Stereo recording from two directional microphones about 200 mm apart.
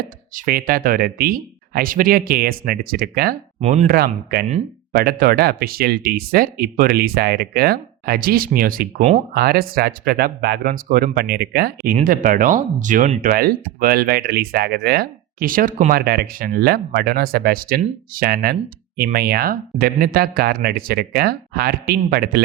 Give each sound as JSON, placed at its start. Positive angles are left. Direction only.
{"t": 0.3, "sound": "speech", "side_deg": -45}
{"t": 3.6, "sound": "speech", "side_deg": -30}
{"t": 3.8, "sound": "speech", "side_deg": -50}
{"t": 12.0, "sound": "speech", "side_deg": -45}